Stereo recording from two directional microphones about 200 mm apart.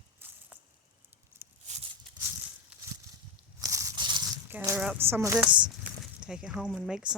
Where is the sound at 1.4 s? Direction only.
10° right (ahead or behind).